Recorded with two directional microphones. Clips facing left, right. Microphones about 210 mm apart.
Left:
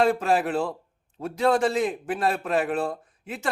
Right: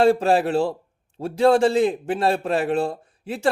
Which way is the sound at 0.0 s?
30° right (ahead or behind).